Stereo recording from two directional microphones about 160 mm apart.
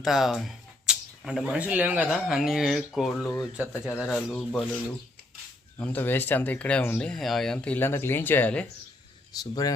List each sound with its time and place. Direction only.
0.0 s speech: centre (ahead or behind)
3.6 s speech: 15° left (ahead or behind)
4.0 s speech: 5° left (ahead or behind)
5.8 s speech: 10° left (ahead or behind)
9.3 s speech: 25° left (ahead or behind)